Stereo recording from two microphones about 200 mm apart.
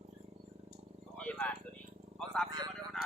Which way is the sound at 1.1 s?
5° left (ahead or behind).